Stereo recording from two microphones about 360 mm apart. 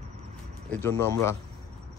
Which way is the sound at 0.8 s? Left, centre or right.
Centre.